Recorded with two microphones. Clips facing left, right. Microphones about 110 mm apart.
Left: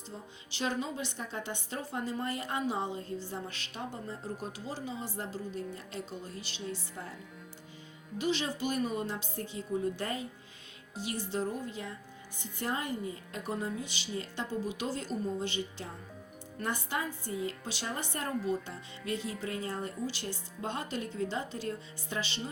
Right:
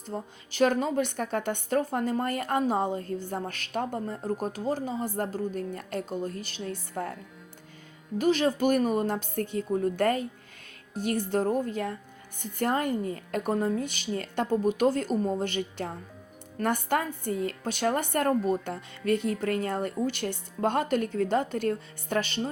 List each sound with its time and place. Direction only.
0.1 s a woman's voice: 55° right (ahead or behind)
8.2 s a woman's voice: 50° right (ahead or behind)